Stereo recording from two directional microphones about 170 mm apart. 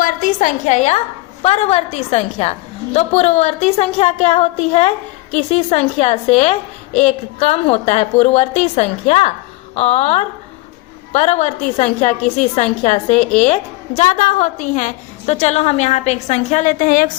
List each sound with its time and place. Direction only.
0.0 s a woman's voice: 50° left (ahead or behind)